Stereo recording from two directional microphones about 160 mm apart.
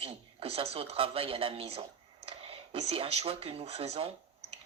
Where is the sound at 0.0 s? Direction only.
35° right (ahead or behind).